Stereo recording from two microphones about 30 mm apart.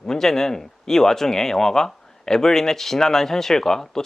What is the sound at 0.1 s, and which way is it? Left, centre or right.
Speech, centre.